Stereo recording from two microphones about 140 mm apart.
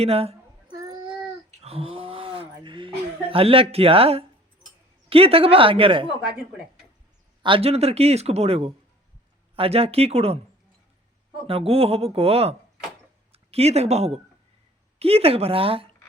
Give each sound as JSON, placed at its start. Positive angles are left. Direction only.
{"t": 0.0, "sound": "speech", "side_deg": -45}
{"t": 0.7, "sound": "child singing", "side_deg": -25}
{"t": 1.6, "sound": "a sound", "side_deg": -40}
{"t": 5.0, "sound": "speech", "side_deg": -45}
{"t": 6.1, "sound": "speech", "side_deg": -5}
{"t": 7.4, "sound": "speech", "side_deg": -40}
{"t": 11.4, "sound": "speech", "side_deg": -45}